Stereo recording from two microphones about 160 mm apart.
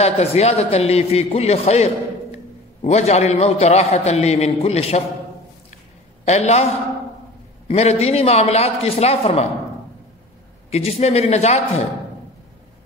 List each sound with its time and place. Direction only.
0.0 s a man's voice: 40° left (ahead or behind)
6.2 s a man's voice: 45° left (ahead or behind)
7.6 s speech: 40° left (ahead or behind)
10.7 s speech: 40° left (ahead or behind)